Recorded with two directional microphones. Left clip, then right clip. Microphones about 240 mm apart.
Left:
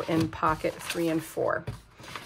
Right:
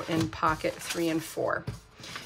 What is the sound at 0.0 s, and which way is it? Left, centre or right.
Speech, centre.